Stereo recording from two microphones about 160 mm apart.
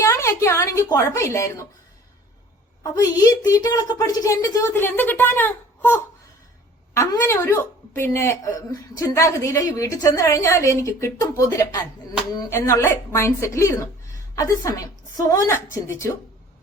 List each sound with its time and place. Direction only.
0.0 s a woman's voice: 20° left (ahead or behind)
2.8 s a woman's voice: 20° left (ahead or behind)